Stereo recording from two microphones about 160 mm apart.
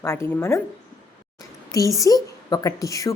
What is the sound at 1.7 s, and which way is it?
A woman's voice, 20° left (ahead or behind).